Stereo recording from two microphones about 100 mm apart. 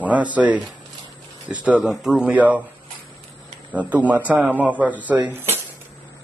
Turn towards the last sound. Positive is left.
turn(degrees=-25)  # may be behind; listen again after turning